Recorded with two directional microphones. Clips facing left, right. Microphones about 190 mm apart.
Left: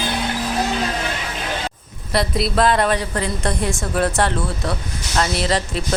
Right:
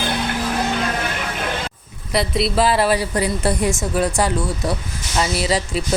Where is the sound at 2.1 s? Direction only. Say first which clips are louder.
Even; centre (ahead or behind).